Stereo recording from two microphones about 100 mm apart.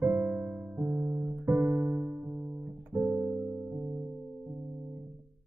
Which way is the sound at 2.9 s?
Centre (ahead or behind).